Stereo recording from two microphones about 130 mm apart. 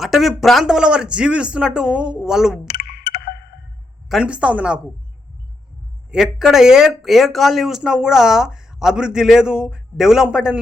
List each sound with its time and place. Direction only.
0.0 s speech: centre (ahead or behind)
4.1 s speech: 5° right (ahead or behind)
6.1 s speech: 5° right (ahead or behind)